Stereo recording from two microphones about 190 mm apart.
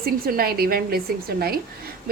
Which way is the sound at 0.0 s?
50° right (ahead or behind).